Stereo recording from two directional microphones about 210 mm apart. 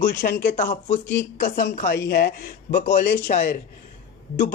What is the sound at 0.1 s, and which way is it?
Speech, 10° left (ahead or behind).